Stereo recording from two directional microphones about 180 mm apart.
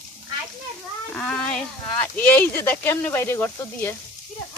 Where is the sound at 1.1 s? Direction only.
5° left (ahead or behind).